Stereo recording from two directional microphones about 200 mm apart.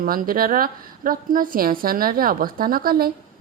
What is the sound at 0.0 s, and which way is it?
A woman's voice, 45° right (ahead or behind).